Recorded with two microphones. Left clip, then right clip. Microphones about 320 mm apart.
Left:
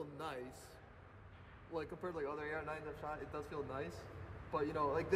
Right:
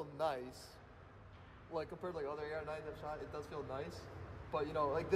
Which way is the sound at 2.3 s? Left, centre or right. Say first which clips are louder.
Even; centre.